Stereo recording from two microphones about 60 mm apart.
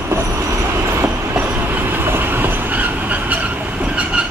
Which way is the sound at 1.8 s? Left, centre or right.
Right.